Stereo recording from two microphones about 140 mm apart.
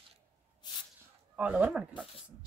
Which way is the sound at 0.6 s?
30° left (ahead or behind).